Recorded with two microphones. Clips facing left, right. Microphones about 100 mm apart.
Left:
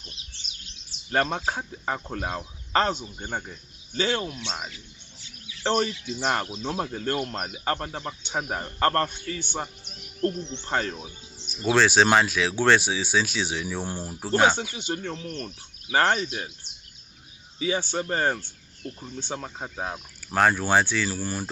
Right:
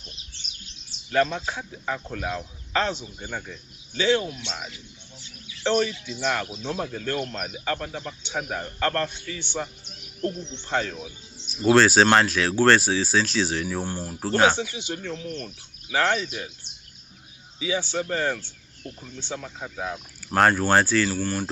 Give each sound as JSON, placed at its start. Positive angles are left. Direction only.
{"t": 1.1, "sound": "speech", "side_deg": 45}
{"t": 3.2, "sound": "speech", "side_deg": 30}
{"t": 3.9, "sound": "speech", "side_deg": 40}
{"t": 5.6, "sound": "speech", "side_deg": 35}
{"t": 10.7, "sound": "speech", "side_deg": 45}
{"t": 11.6, "sound": "speech", "side_deg": -5}
{"t": 14.2, "sound": "speech", "side_deg": 5}
{"t": 14.6, "sound": "speech", "side_deg": 45}
{"t": 17.6, "sound": "speech", "side_deg": 45}
{"t": 20.3, "sound": "speech", "side_deg": 0}